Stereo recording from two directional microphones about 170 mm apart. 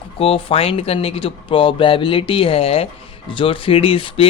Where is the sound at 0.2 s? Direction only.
35° left (ahead or behind).